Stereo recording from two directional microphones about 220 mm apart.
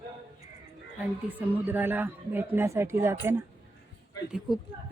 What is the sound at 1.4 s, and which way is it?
Speech, 10° right (ahead or behind).